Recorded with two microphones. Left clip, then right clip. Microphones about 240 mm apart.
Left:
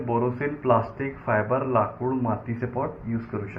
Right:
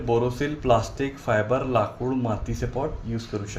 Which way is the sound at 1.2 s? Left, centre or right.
Right.